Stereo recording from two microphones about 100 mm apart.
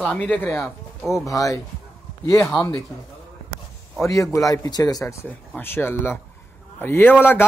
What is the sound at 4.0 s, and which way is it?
Speech, 30° left (ahead or behind).